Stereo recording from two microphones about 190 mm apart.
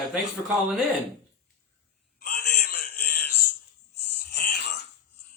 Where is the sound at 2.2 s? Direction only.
55° left (ahead or behind).